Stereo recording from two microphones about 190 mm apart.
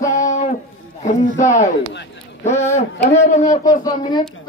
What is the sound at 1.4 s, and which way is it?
Speech, 40° left (ahead or behind).